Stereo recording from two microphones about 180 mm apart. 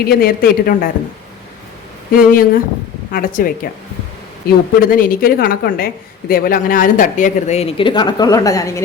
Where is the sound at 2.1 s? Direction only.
50° left (ahead or behind).